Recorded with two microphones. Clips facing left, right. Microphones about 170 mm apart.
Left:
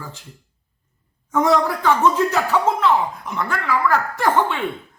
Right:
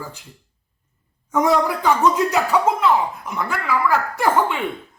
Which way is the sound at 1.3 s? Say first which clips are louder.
Even; 10° right (ahead or behind).